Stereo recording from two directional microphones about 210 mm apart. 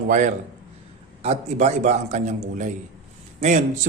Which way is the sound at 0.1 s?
35° right (ahead or behind).